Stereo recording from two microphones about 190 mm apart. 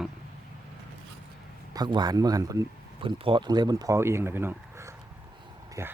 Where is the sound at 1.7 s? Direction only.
20° right (ahead or behind).